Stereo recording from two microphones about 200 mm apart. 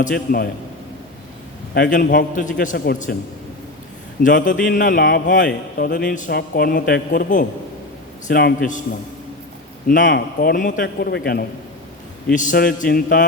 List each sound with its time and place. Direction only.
0.0 s a man's voice: 45° left (ahead or behind)
1.7 s a man's voice: 50° left (ahead or behind)
4.2 s a man's voice: 40° left (ahead or behind)
10.0 s a man's voice: 55° left (ahead or behind)
12.3 s a man's voice: 40° left (ahead or behind)